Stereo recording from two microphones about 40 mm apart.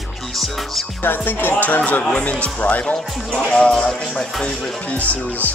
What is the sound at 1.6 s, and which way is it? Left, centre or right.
Speech, left.